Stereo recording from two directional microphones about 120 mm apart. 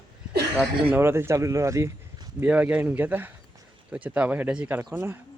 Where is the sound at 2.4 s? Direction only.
10° right (ahead or behind).